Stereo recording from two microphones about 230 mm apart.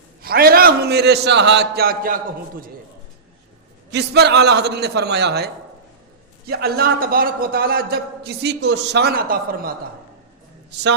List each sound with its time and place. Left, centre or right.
0.2 s a man's voice: right
3.9 s a man's voice: right
6.5 s a man's voice: right